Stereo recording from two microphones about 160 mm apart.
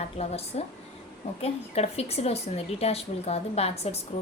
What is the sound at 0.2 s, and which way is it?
A woman's voice, 40° left (ahead or behind).